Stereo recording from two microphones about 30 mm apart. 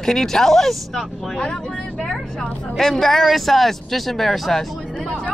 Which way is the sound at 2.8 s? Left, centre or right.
Centre.